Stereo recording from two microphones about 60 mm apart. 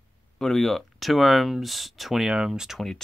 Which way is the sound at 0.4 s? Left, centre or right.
Centre.